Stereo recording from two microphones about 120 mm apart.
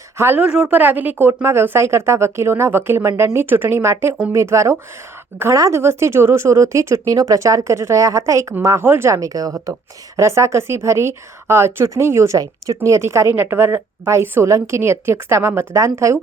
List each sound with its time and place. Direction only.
0.2 s speech: 15° right (ahead or behind)